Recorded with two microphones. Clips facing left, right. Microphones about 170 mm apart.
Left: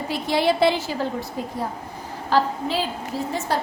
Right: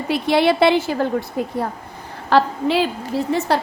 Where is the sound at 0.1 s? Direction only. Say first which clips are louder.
Right 5 dB; 65° right (ahead or behind).